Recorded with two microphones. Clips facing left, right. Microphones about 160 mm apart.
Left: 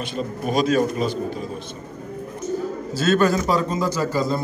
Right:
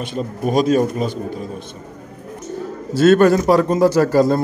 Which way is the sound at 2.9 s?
60° right (ahead or behind).